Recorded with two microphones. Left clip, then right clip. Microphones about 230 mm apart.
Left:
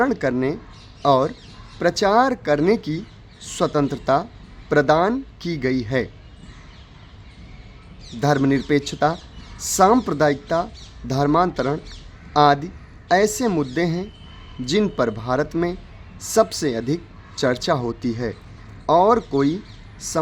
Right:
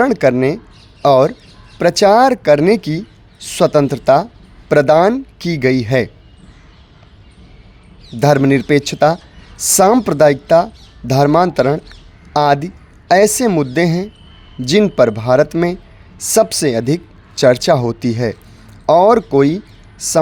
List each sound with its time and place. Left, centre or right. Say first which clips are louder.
0.0 s a woman's voice: right 8 dB; right
8.2 s a woman's voice: right 8 dB; right